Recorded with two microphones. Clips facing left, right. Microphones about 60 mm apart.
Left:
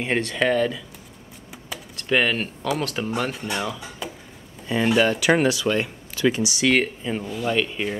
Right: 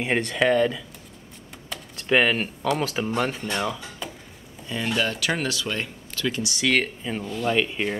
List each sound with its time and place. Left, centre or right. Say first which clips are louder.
0.0 s speech: even; centre
4.6 s speech: left 6 dB; centre
6.5 s speech: left 3 dB; centre
7.5 s speech: even; centre